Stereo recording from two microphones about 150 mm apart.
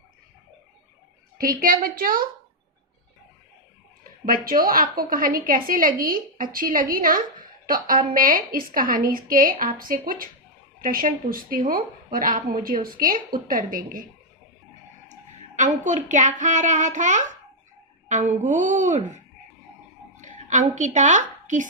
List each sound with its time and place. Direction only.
1.4 s a woman's voice: 75° right (ahead or behind)
4.3 s a woman's voice: 70° right (ahead or behind)
15.0 s a woman's voice: 55° right (ahead or behind)